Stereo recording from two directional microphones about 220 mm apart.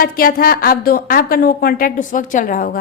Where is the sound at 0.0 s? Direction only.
40° left (ahead or behind).